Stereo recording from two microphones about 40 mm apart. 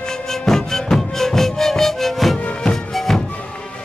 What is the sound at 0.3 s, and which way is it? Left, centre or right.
Music, centre.